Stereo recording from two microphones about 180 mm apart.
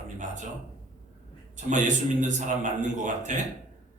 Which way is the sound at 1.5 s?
45° right (ahead or behind).